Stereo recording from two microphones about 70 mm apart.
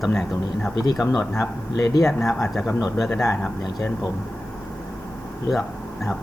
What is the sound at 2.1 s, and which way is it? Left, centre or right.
Speech, centre.